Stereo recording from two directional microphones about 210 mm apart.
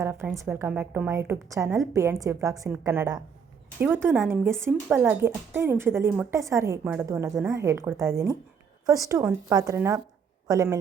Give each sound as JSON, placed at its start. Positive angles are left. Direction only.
{"t": 0.0, "sound": "a woman's voice", "side_deg": -10}